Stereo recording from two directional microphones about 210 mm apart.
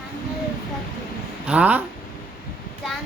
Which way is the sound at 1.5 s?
5° right (ahead or behind).